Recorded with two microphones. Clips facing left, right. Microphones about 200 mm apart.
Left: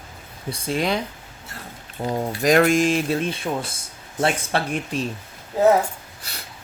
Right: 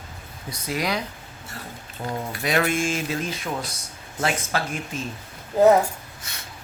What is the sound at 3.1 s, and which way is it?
Speech, 30° left (ahead or behind).